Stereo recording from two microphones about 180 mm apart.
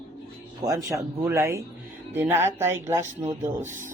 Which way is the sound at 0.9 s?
15° right (ahead or behind).